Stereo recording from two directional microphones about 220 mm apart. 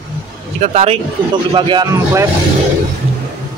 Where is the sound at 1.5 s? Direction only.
15° right (ahead or behind).